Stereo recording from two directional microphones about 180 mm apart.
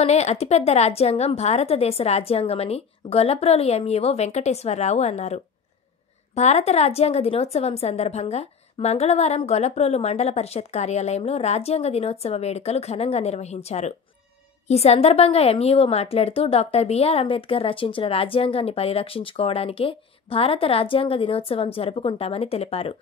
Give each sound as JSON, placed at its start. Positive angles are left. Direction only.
{"t": 0.0, "sound": "a woman's voice", "side_deg": 40}